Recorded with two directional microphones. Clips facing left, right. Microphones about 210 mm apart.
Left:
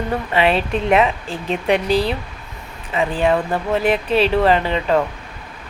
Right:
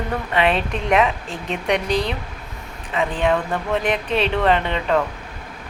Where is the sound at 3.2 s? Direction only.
35° left (ahead or behind).